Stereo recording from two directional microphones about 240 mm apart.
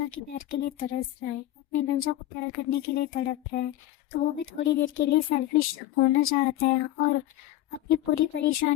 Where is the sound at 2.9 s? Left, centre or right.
Left.